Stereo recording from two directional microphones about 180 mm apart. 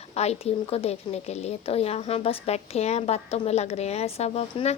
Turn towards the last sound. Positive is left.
turn(degrees=35)  # may be behind; listen again after turning